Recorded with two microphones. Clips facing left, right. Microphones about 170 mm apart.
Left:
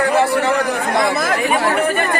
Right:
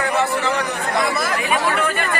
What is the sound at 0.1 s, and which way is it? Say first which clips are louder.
Speech: left 5 dB; 60° left (ahead or behind).